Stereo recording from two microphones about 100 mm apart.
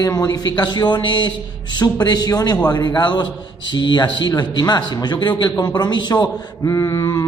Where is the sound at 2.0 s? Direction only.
40° left (ahead or behind).